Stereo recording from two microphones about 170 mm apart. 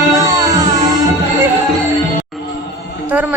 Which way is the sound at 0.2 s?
20° right (ahead or behind).